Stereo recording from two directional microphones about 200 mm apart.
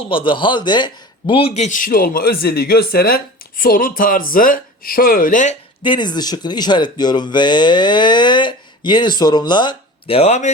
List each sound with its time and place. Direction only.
0.1 s speech: 25° left (ahead or behind)
5.8 s speech: 25° left (ahead or behind)